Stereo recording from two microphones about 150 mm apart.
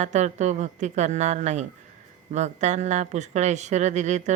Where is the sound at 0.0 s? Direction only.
50° right (ahead or behind).